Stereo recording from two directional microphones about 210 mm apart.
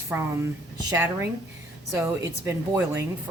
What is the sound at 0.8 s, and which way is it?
A woman's voice, 15° right (ahead or behind).